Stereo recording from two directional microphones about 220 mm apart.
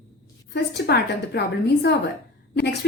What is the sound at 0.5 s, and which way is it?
Speech, 50° left (ahead or behind).